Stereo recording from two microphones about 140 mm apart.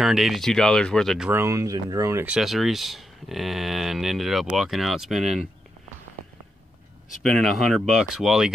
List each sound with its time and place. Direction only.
0.0 s speech: centre (ahead or behind)
1.3 s speech: 20° right (ahead or behind)
2.2 s speech: 5° right (ahead or behind)
7.2 s speech: centre (ahead or behind)